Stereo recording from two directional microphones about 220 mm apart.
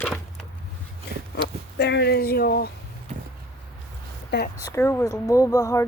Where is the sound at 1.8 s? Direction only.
50° left (ahead or behind).